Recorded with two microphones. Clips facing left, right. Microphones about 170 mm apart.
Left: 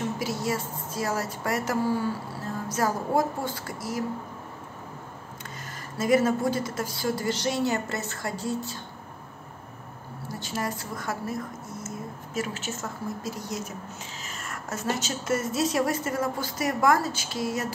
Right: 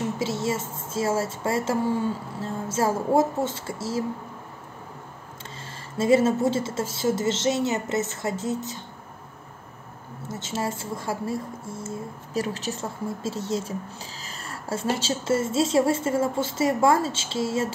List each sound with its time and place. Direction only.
0.2 s speech: 25° right (ahead or behind)
5.9 s speech: 25° right (ahead or behind)
10.2 s a woman's voice: 20° right (ahead or behind)